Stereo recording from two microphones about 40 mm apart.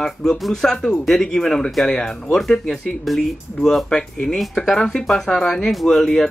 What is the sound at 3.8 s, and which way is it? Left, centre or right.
Speech, centre.